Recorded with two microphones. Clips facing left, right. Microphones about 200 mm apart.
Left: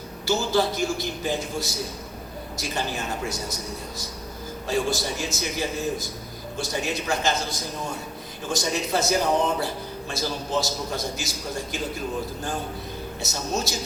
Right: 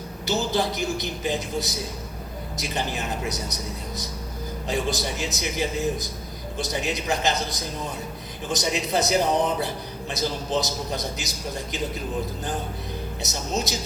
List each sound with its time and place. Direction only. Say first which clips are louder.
0.3 s a man's voice: left 2 dB; 20° right (ahead or behind)
13.2 s a man's voice: even; 20° right (ahead or behind)